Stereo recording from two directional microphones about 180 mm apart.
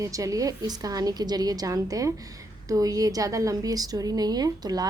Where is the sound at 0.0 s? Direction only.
20° right (ahead or behind).